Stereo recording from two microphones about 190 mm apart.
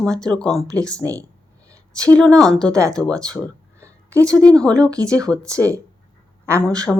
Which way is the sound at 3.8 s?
15° right (ahead or behind).